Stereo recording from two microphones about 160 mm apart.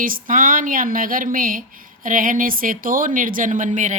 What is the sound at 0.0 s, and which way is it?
Speech, 60° right (ahead or behind).